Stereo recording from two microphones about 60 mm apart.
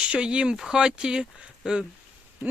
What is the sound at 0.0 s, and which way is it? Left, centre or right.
Speech, centre.